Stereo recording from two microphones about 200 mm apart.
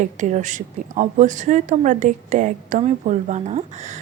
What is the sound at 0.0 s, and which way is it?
Speech, 40° right (ahead or behind).